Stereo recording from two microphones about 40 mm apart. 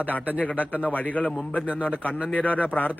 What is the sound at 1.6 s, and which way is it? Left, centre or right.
Speech, right.